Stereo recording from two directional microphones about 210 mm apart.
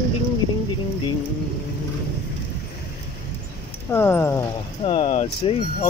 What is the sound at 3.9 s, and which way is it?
Speech, 10° left (ahead or behind).